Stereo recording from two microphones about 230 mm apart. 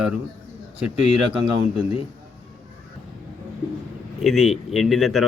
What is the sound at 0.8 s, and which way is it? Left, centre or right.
Speech, left.